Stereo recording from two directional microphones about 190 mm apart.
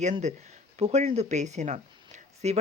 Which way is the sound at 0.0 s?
40° right (ahead or behind).